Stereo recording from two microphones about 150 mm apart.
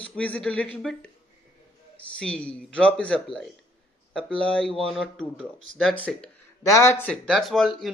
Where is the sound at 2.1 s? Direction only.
5° left (ahead or behind).